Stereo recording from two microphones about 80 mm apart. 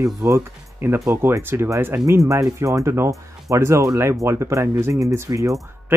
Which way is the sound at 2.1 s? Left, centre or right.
Right.